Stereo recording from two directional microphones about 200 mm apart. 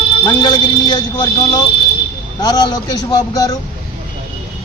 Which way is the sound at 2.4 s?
20° left (ahead or behind).